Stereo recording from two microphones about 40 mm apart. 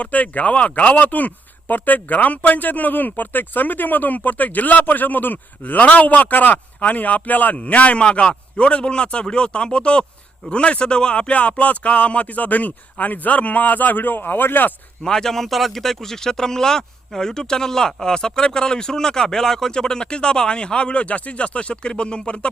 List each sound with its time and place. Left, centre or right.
0.0 s speech: left
15.0 s speech: centre